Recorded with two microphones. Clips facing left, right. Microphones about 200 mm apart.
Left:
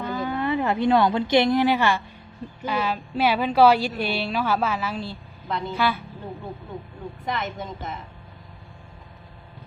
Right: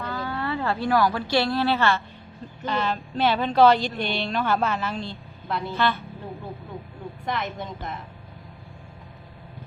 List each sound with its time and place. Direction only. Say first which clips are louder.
0.0 s speech: left 4 dB; 20° left (ahead or behind); by 5.7 s centre (ahead or behind)
5.7 s speech: even; 10° left (ahead or behind)
7.3 s a woman's voice: even; centre (ahead or behind)